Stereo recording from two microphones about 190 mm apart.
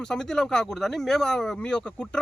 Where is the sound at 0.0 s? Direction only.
5° left (ahead or behind).